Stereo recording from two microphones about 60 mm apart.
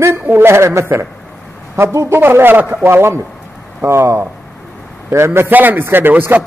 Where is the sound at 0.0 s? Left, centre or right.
Right.